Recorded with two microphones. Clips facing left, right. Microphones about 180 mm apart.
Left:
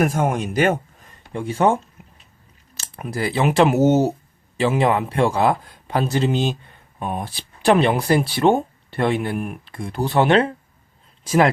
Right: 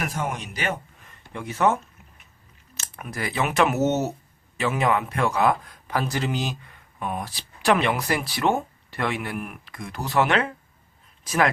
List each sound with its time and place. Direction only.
0.0 s a man's voice: 50° left (ahead or behind)
1.3 s a man's voice: 30° left (ahead or behind)